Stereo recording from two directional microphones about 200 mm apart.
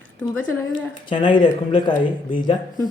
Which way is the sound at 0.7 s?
25° left (ahead or behind).